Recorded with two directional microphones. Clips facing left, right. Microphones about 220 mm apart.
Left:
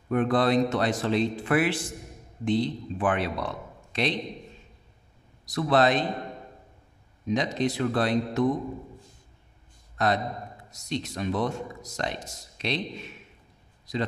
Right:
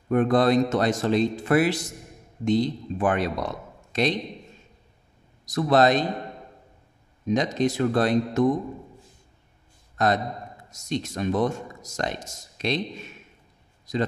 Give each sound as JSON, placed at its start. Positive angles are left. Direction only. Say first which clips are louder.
{"t": 0.1, "sound": "speech", "louder": "right 3 dB", "side_deg": -45}
{"t": 5.4, "sound": "speech", "louder": "right 3 dB", "side_deg": -45}
{"t": 7.2, "sound": "speech", "louder": "right 3 dB", "side_deg": -45}
{"t": 10.0, "sound": "a man's voice", "louder": "right 2 dB", "side_deg": -45}